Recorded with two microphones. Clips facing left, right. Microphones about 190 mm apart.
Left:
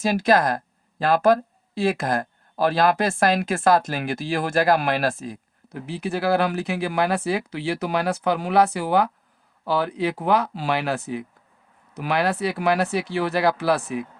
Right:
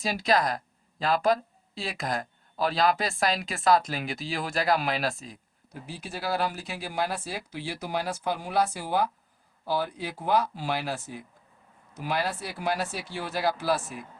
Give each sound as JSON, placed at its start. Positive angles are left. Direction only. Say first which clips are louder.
{"t": 0.1, "sound": "speech", "louder": "left 5 dB", "side_deg": 50}